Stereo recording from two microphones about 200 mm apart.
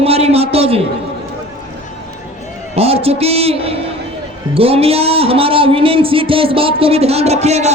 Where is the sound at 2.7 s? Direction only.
30° right (ahead or behind).